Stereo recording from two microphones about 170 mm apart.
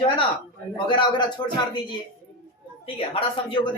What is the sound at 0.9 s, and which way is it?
Speech, 30° left (ahead or behind).